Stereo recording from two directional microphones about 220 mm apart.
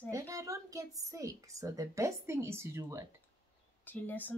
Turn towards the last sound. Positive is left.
turn(degrees=10)  # may be behind; listen again after turning